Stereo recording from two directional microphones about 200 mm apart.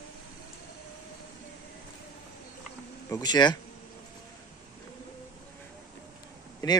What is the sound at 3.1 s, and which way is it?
Speech, 20° left (ahead or behind).